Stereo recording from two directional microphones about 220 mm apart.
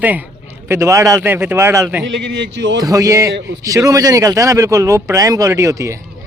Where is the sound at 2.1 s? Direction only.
55° right (ahead or behind).